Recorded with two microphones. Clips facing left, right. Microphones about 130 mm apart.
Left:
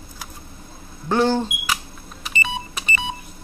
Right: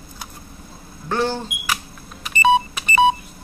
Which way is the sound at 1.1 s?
15° left (ahead or behind).